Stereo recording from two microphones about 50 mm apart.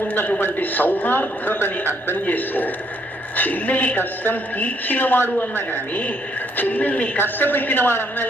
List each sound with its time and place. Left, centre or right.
0.1 s a man's voice: left
2.2 s a woman's voice: left
7.2 s a man's voice: left